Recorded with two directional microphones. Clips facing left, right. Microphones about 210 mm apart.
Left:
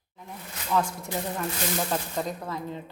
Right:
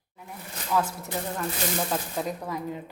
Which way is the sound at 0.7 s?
5° right (ahead or behind).